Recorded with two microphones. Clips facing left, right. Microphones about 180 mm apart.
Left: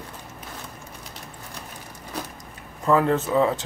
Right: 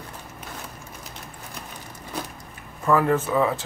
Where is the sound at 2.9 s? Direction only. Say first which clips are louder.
Even; 25° left (ahead or behind).